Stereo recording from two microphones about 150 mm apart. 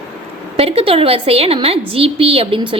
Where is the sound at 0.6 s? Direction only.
40° right (ahead or behind).